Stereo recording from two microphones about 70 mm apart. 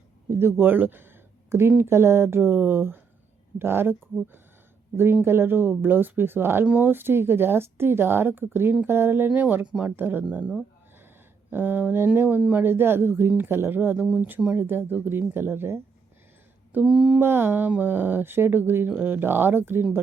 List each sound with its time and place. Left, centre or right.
0.3 s speech: right
10.3 s speech: centre
11.5 s speech: right
12.6 s speech: right
16.8 s speech: centre
17.2 s speech: right